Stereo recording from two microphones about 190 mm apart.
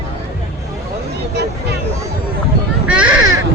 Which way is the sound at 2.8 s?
5° right (ahead or behind).